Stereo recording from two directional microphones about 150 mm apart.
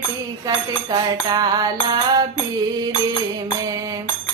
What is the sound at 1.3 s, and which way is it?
Mantra, 25° right (ahead or behind).